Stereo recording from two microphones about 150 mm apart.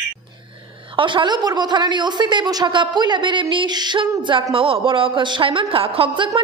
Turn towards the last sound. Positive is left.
turn(degrees=-35)  # may be behind; listen again after turning